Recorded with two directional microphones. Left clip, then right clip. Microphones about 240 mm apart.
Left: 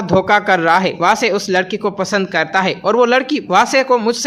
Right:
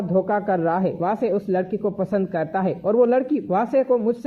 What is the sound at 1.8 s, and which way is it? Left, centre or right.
A man's voice, left.